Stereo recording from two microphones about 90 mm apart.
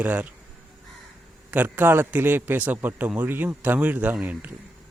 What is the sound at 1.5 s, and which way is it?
A man's voice, 20° right (ahead or behind).